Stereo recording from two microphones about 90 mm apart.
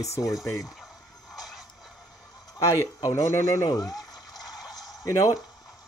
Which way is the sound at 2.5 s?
45° left (ahead or behind).